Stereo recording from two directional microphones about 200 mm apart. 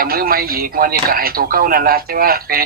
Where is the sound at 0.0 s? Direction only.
45° right (ahead or behind).